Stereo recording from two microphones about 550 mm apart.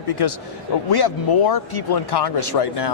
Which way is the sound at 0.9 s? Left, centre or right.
Left.